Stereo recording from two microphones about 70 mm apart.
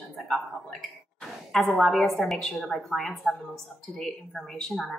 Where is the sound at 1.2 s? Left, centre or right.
Centre.